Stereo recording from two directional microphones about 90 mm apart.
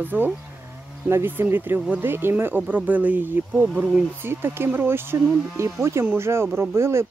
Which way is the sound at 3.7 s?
10° right (ahead or behind).